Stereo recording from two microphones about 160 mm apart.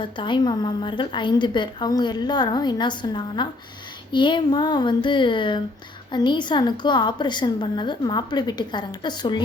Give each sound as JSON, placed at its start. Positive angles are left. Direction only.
{"t": 0.0, "sound": "a woman's voice", "side_deg": 30}